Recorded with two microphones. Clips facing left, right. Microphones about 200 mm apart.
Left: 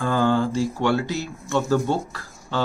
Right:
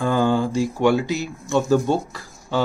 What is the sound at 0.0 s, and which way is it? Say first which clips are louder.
Speech: right 1 dB; 15° right (ahead or behind).